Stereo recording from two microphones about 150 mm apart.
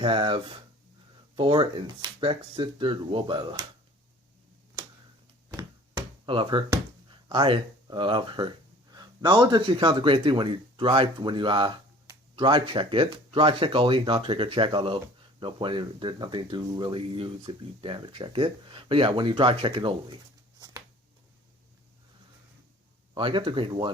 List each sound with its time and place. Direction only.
0.0 s speech: 35° right (ahead or behind)
5.5 s a sound: 30° right (ahead or behind)
7.3 s speech: 35° right (ahead or behind)
23.1 s speech: 35° right (ahead or behind)